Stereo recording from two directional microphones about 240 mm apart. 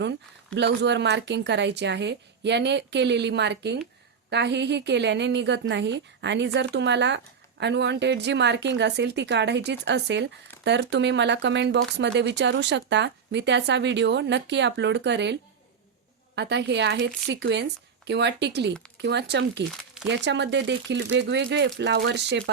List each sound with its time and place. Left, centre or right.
0.5 s speech: right